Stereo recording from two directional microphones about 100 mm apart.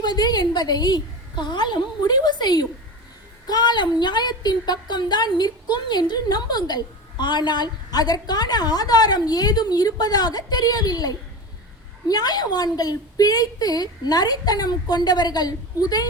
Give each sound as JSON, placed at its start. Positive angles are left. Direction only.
{"t": 0.0, "sound": "a woman's voice", "side_deg": 45}